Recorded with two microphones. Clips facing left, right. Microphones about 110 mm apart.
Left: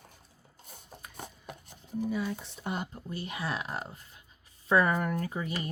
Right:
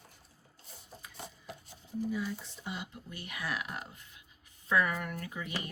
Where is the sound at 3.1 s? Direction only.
30° left (ahead or behind).